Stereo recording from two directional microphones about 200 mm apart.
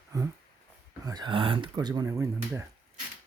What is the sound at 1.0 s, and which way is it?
Speech, 20° right (ahead or behind).